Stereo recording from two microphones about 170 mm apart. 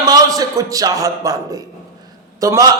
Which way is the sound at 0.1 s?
20° right (ahead or behind).